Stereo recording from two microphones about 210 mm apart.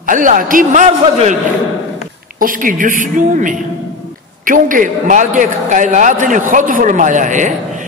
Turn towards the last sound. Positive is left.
turn(degrees=-35)  # may be behind; listen again after turning